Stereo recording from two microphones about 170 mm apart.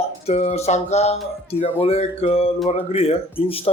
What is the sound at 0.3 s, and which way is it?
Speech, 40° left (ahead or behind).